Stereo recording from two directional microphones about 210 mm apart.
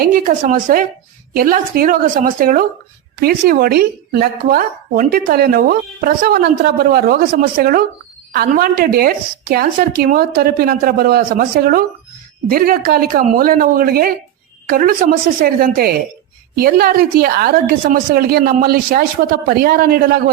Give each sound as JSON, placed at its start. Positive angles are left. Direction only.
{"t": 0.0, "sound": "a woman's voice", "side_deg": -40}